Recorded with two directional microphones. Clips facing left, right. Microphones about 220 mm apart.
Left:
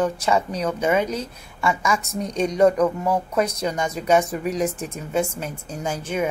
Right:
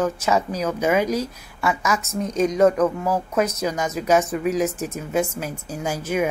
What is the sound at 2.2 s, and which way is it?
Speech, 35° left (ahead or behind).